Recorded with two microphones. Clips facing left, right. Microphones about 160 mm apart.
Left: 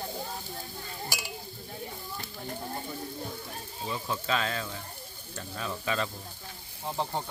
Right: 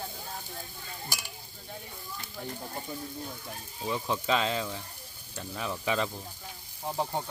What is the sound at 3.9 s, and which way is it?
Speech, 20° right (ahead or behind).